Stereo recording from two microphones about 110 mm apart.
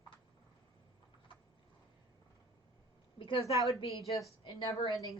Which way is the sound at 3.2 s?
50° left (ahead or behind).